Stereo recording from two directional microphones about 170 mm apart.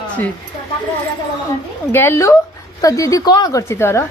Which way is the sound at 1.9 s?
15° left (ahead or behind).